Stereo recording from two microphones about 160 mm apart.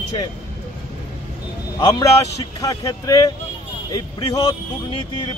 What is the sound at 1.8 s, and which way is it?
Speech, 25° left (ahead or behind).